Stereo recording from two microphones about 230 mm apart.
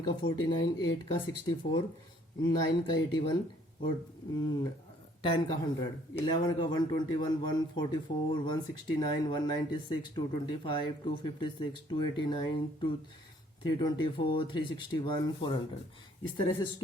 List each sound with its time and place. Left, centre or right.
0.0 s speech: left
5.2 s speech: left